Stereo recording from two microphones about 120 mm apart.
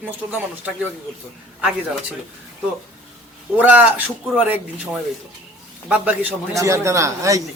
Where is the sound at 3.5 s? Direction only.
15° right (ahead or behind).